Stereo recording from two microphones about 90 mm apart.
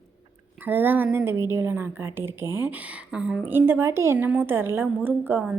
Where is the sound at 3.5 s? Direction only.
25° right (ahead or behind).